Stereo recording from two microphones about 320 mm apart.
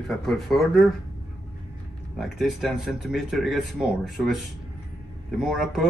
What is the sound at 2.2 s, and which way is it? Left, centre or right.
Speech, centre.